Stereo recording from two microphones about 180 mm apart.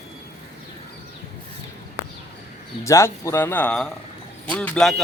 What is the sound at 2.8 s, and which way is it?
A man's voice, 15° left (ahead or behind).